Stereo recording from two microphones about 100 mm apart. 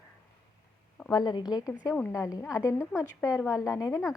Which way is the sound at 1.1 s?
45° left (ahead or behind).